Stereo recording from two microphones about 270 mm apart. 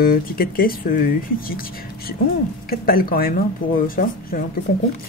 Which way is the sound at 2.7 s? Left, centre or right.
Left.